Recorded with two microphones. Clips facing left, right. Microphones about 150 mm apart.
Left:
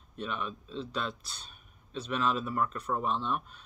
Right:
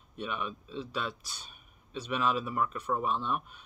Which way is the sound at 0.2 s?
10° right (ahead or behind).